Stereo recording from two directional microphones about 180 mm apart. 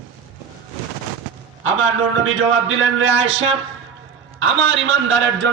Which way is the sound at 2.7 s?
90° right.